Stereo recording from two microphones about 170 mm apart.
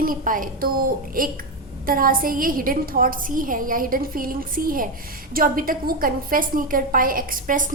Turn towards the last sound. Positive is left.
turn(degrees=-55)  # may be behind; listen again after turning